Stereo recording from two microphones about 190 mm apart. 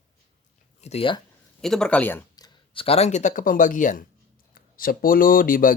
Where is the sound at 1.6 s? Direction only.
Centre (ahead or behind); by 2.8 s 20° left (ahead or behind).